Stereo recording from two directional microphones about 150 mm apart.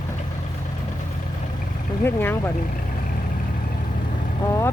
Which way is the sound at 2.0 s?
15° left (ahead or behind).